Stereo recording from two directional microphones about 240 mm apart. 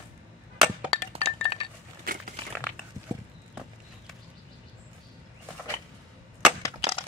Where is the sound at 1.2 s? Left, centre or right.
Left.